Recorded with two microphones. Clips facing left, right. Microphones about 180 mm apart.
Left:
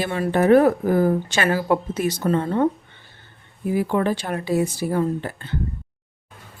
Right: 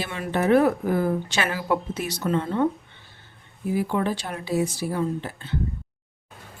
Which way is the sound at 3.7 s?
55° left (ahead or behind).